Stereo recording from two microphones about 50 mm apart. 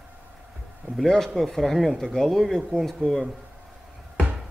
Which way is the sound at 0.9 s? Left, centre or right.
Centre.